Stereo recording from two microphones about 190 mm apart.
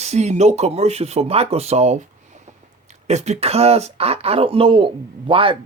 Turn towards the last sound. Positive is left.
turn(degrees=-30)  # may be behind; listen again after turning